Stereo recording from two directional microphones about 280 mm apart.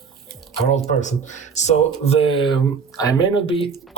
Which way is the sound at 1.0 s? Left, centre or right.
Left.